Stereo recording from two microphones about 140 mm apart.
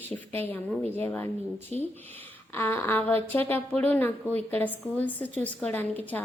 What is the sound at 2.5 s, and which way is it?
A woman's voice, 15° left (ahead or behind).